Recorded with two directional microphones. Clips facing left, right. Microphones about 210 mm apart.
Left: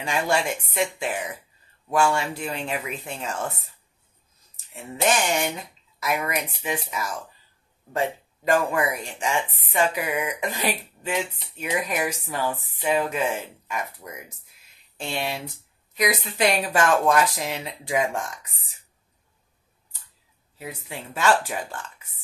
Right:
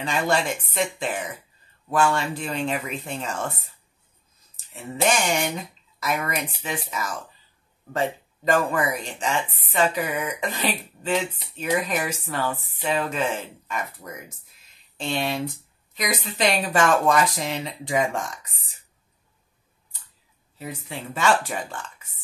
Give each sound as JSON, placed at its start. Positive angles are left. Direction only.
{"t": 0.0, "sound": "speech", "side_deg": 10}
{"t": 5.1, "sound": "speech", "side_deg": 5}
{"t": 8.5, "sound": "speech", "side_deg": 10}
{"t": 20.5, "sound": "speech", "side_deg": 5}